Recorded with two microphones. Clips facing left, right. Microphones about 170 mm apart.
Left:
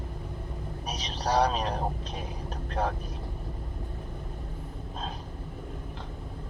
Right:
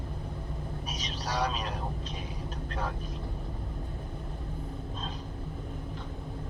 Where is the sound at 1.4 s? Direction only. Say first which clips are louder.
Left 5 dB; 50° left (ahead or behind).